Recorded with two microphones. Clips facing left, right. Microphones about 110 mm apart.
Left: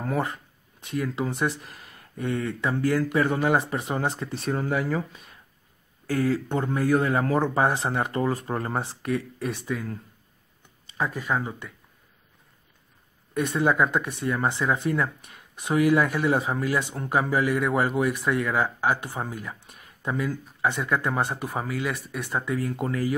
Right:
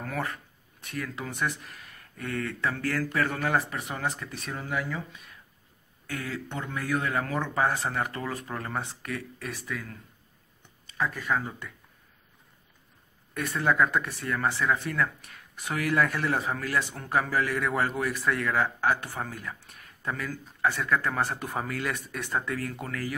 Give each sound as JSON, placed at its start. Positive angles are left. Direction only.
{"t": 0.0, "sound": "speech", "side_deg": 25}
{"t": 11.0, "sound": "speech", "side_deg": 15}
{"t": 13.3, "sound": "speech", "side_deg": 20}